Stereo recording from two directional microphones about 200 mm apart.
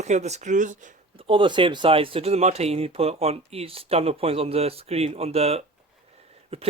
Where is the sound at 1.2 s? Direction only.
25° right (ahead or behind).